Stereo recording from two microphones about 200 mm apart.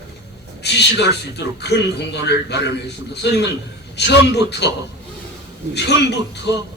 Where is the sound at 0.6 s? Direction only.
55° left (ahead or behind).